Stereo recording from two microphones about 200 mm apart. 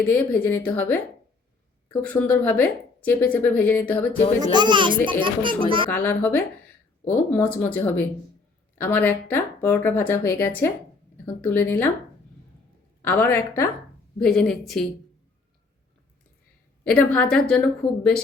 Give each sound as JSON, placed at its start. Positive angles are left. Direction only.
{"t": 0.0, "sound": "a woman's voice", "side_deg": 10}
{"t": 4.5, "sound": "a child's voice", "side_deg": -25}
{"t": 5.9, "sound": "a woman's voice", "side_deg": 10}
{"t": 13.0, "sound": "a woman's voice", "side_deg": 10}
{"t": 16.9, "sound": "a woman's voice", "side_deg": 5}